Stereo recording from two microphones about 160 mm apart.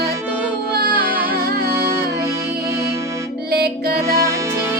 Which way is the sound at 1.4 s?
75° right (ahead or behind).